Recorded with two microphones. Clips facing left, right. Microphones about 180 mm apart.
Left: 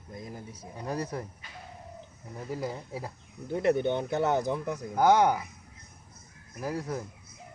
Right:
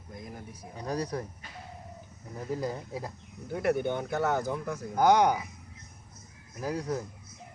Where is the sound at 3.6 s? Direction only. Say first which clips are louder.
Left 2 dB; 25° left (ahead or behind).